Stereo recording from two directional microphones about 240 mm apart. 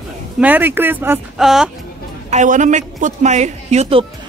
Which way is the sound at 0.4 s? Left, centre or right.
Centre.